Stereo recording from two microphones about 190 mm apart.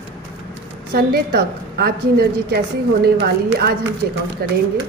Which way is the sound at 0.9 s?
55° right (ahead or behind).